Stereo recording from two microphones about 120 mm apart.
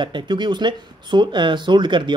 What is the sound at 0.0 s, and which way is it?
Speech, 40° right (ahead or behind).